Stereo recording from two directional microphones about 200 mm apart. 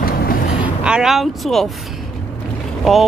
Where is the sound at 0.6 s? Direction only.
5° right (ahead or behind).